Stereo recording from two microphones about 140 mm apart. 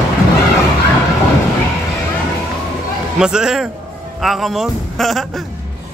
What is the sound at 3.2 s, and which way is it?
Speech, 5° right (ahead or behind).